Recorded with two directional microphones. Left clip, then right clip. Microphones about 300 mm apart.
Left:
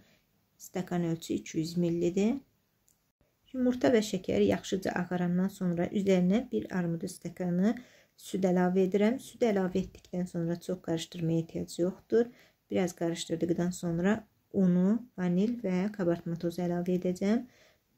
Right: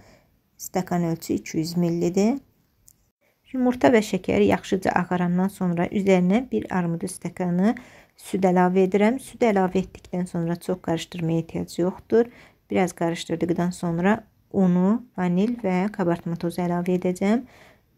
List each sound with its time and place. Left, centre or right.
0.7 s speech: centre
1.6 s speech: centre
1.9 s speech: centre
3.5 s speech: centre